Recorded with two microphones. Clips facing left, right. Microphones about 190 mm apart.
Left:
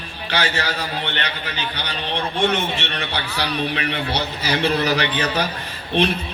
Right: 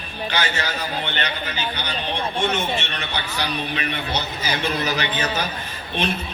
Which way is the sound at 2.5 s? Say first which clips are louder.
Left 1 dB; 65° left (ahead or behind).